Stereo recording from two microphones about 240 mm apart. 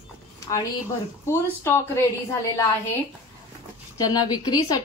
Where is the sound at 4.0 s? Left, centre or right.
Centre.